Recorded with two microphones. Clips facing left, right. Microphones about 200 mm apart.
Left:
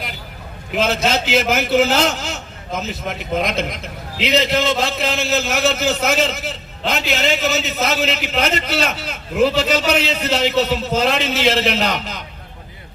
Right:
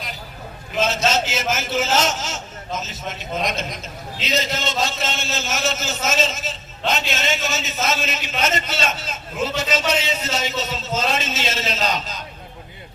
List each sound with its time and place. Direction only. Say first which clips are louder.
0.8 s a man's voice: left 2 dB; 60° left (ahead or behind)